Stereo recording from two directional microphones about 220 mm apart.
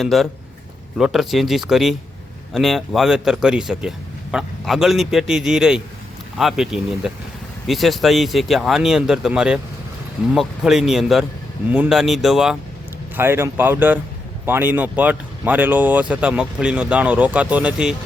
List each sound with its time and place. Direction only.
0.0 s speech: centre (ahead or behind)